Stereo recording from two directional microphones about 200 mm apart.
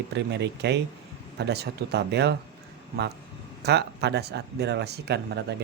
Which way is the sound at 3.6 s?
55° right (ahead or behind).